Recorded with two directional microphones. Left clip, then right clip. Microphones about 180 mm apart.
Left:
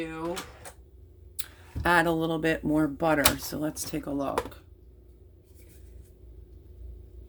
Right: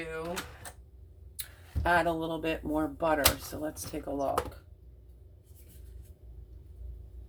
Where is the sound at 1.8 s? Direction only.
60° left (ahead or behind).